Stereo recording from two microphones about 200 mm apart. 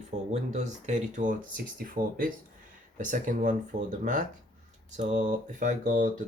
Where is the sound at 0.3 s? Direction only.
35° right (ahead or behind).